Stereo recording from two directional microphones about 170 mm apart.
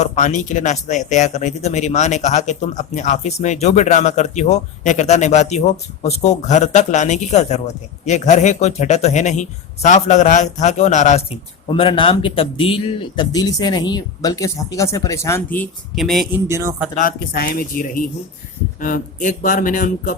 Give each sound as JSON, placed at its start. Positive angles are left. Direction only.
{"t": 0.0, "sound": "speech", "side_deg": 45}
{"t": 11.7, "sound": "speech", "side_deg": 30}
{"t": 16.3, "sound": "speech", "side_deg": -15}
{"t": 16.9, "sound": "a man's voice", "side_deg": 55}